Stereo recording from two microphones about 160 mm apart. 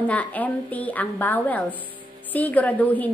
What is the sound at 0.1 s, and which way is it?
A woman's voice, 10° left (ahead or behind).